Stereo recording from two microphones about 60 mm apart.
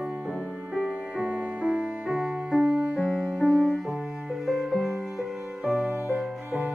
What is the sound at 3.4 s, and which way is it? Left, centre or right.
Music, centre.